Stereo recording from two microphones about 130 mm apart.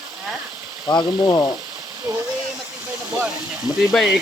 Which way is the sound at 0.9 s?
35° left (ahead or behind).